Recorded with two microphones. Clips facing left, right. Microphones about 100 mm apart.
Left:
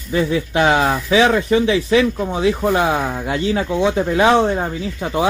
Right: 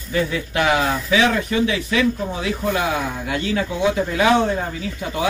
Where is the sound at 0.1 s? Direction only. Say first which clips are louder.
Left 4 dB; 30° left (ahead or behind).